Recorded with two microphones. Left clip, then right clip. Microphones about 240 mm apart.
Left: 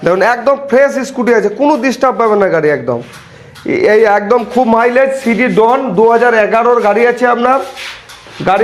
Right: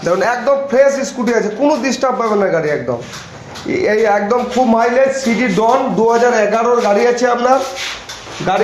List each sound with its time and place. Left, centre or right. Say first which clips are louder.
0.0 s a man's voice: left 4 dB; left